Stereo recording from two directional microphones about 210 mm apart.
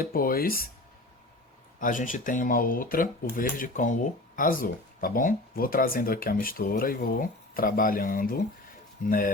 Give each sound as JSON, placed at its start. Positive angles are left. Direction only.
{"t": 0.0, "sound": "speech", "side_deg": 45}
{"t": 1.8, "sound": "speech", "side_deg": 40}